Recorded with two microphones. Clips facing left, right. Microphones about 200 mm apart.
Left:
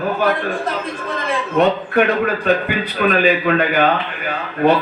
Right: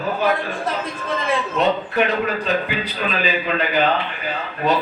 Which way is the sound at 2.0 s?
60° left (ahead or behind).